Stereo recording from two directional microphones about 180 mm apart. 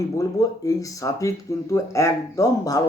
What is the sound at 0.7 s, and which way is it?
Speech, 20° left (ahead or behind).